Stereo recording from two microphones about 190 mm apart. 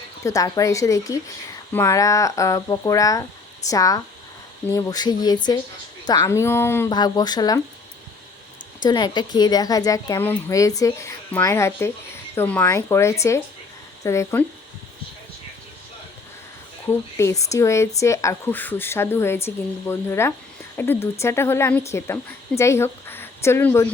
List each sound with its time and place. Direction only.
0.3 s speech: 20° left (ahead or behind)
8.8 s speech: 20° left (ahead or behind)
17.2 s speech: 15° left (ahead or behind)